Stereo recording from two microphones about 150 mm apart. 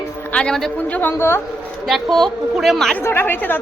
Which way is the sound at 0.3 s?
5° left (ahead or behind).